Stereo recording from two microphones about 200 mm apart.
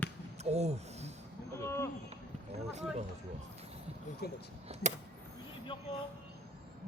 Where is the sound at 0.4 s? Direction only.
35° right (ahead or behind).